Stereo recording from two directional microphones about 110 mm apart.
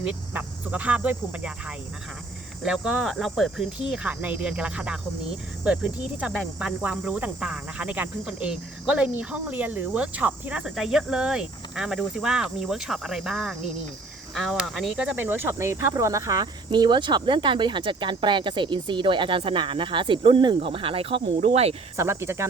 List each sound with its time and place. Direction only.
0.0 s speech: 15° right (ahead or behind); by 21.8 s 65° right (ahead or behind)
21.9 s speech: 25° right (ahead or behind)